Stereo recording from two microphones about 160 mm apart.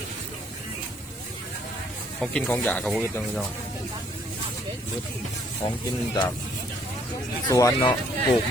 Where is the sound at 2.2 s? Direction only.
10° left (ahead or behind).